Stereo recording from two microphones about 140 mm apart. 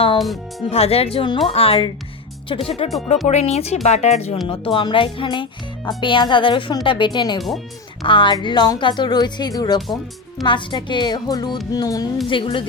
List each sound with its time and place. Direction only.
0.7 s speech: 45° left (ahead or behind)
4.4 s speech: 40° left (ahead or behind)
9.8 s speech: centre (ahead or behind)
10.4 s speech: 35° left (ahead or behind)